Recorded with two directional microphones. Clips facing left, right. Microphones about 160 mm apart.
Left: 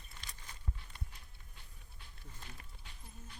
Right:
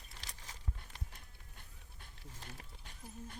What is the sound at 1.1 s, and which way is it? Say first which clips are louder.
Dog: right 2 dB; 50° right (ahead or behind).